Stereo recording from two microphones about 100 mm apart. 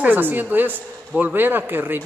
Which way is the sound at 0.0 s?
20° right (ahead or behind).